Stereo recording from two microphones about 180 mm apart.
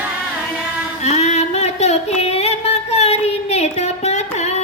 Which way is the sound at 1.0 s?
40° left (ahead or behind).